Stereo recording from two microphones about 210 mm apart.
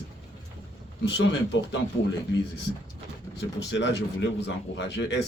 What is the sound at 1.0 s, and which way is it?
Speech, 60° left (ahead or behind).